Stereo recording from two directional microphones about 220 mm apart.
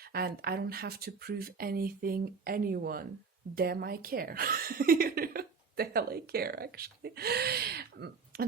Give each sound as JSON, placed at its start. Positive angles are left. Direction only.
{"t": 0.1, "sound": "speech", "side_deg": -45}